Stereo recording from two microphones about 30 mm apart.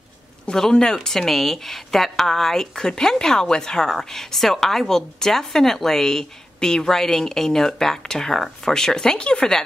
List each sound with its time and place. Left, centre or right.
0.6 s speech: centre
0.9 s a woman's voice: centre
2.7 s speech: left
3.9 s a woman's voice: centre
9.2 s speech: left